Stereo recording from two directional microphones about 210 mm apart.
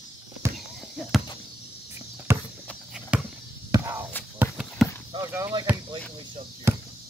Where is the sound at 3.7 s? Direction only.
15° right (ahead or behind).